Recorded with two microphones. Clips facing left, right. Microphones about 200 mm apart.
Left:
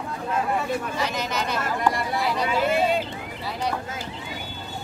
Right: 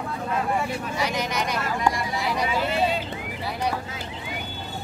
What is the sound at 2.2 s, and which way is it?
Vehicle, 15° right (ahead or behind).